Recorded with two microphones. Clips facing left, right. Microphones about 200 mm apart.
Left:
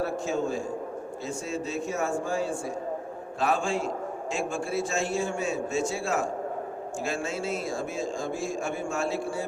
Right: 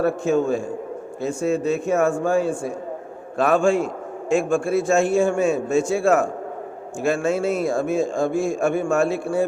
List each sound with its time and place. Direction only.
0.0 s a man's voice: 55° right (ahead or behind)